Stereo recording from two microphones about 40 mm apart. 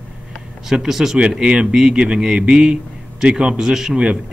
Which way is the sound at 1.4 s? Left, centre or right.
Right.